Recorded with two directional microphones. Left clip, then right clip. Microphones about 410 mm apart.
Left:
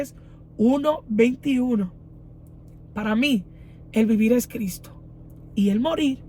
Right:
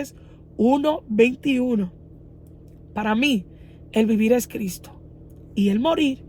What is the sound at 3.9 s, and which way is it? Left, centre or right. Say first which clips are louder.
Speech: right 1 dB; centre.